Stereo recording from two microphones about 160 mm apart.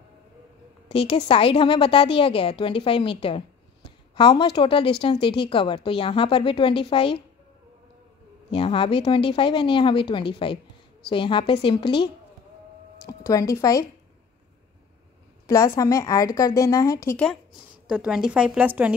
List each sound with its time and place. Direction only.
0.8 s a woman's voice: 35° left (ahead or behind)
8.5 s a woman's voice: 35° left (ahead or behind)
13.3 s a woman's voice: 20° left (ahead or behind)
15.4 s a woman's voice: 20° left (ahead or behind)
17.8 s a woman's voice: 5° right (ahead or behind)